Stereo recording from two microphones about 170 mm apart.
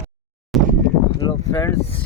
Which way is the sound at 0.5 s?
Centre (ahead or behind).